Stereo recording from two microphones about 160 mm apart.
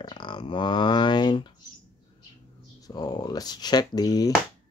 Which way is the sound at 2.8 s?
25° left (ahead or behind).